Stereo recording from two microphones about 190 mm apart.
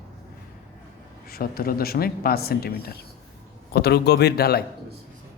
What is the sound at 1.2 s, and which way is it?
A woman's voice, 50° left (ahead or behind).